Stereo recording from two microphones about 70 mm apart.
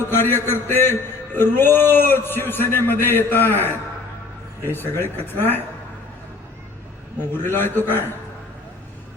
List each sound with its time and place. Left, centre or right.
0.0 s a man's voice: left
7.2 s a man's voice: left